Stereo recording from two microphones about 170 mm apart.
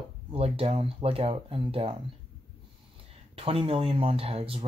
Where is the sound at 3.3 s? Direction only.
35° right (ahead or behind).